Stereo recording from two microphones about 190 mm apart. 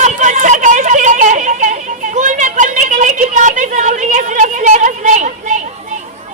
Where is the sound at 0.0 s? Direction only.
40° right (ahead or behind).